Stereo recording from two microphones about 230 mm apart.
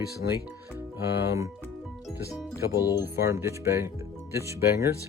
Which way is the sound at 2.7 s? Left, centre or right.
Centre.